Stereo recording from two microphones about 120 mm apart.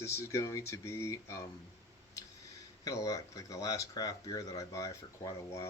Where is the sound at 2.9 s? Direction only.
30° left (ahead or behind).